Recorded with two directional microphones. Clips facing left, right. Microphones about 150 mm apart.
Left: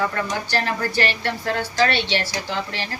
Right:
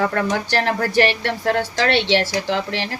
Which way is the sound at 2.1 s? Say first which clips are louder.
Right 6 dB; 90° right.